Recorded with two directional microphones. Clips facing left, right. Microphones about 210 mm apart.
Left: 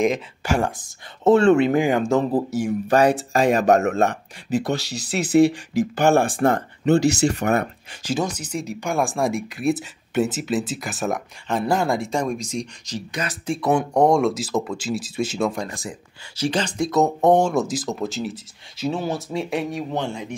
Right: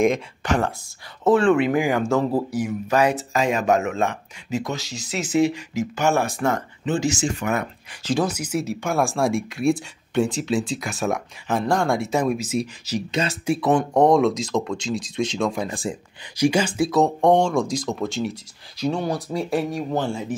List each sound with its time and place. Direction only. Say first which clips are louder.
0.0 s speech: right 1 dB; 5° left (ahead or behind)
2.6 s speech: left 4 dB; 35° left (ahead or behind)
5.4 s speech: left 3 dB; 35° left (ahead or behind)
6.4 s speech: left 3 dB; 45° left (ahead or behind)
6.9 s speech: left 5 dB; 65° left (ahead or behind)
8.2 s speech: right 3 dB; 10° right (ahead or behind)
13.1 s speech: right 4 dB; 25° right (ahead or behind)
13.5 s speech: even; centre (ahead or behind)
15.7 s speech: right 5 dB; 30° right (ahead or behind)
16.3 s speech: right 3 dB; 10° right (ahead or behind)